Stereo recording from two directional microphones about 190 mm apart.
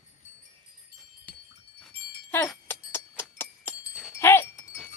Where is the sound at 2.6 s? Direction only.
10° left (ahead or behind).